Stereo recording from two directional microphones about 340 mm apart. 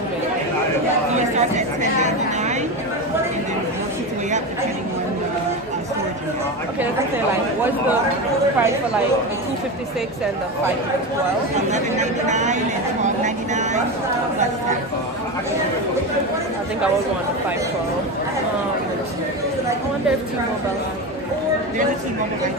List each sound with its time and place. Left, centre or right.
1.1 s a sound: centre
8.5 s speech: centre
11.7 s speech: right